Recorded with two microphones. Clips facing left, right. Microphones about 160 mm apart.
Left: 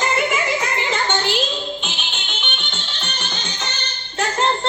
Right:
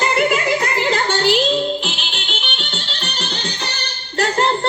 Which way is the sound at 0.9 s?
70° right (ahead or behind).